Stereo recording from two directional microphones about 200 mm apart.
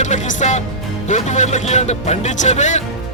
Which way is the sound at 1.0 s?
35° left (ahead or behind).